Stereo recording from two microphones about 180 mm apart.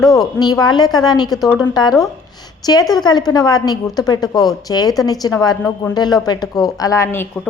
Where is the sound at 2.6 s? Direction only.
20° left (ahead or behind).